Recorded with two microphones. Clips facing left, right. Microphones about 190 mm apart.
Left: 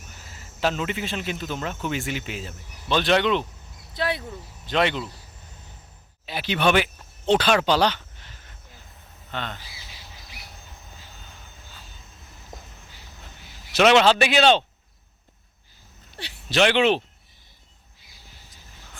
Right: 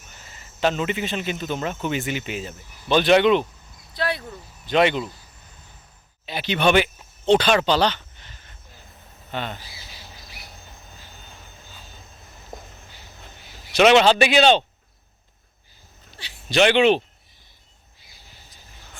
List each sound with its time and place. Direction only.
0.1 s speech: 5° left (ahead or behind)
3.9 s speech: 20° left (ahead or behind)
4.3 s speech: centre (ahead or behind)
6.2 s speech: 5° left (ahead or behind)
9.3 s speech: 10° right (ahead or behind)
13.7 s speech: centre (ahead or behind)
16.5 s speech: centre (ahead or behind)